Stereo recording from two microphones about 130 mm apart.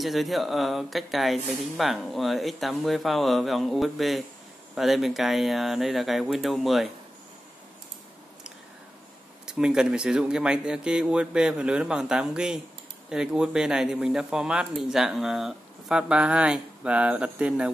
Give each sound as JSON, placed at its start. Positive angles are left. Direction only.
{"t": 0.0, "sound": "speech", "side_deg": 0}
{"t": 9.5, "sound": "speech", "side_deg": -5}